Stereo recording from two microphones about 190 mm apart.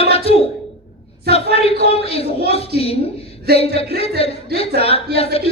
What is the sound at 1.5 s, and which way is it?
Speech, 30° left (ahead or behind).